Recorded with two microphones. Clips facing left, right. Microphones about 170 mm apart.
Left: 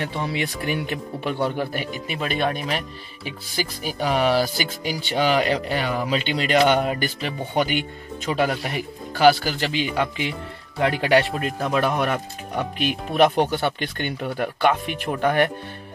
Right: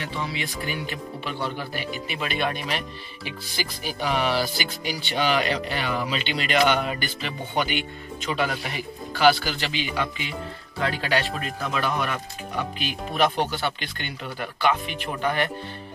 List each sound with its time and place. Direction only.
0.0 s speech: 55° left (ahead or behind)
2.1 s speech: 40° left (ahead or behind)
11.3 s speech: 55° left (ahead or behind)